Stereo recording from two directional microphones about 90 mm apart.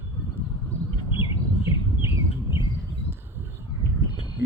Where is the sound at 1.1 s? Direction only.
70° left (ahead or behind).